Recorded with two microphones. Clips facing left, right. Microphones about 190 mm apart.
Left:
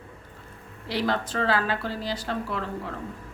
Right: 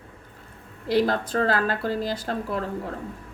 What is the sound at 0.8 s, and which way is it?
Speech, 45° right (ahead or behind).